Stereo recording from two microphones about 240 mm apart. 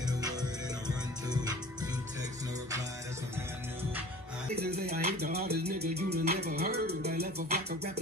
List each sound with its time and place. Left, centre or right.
0.0 s music: centre
4.6 s music: right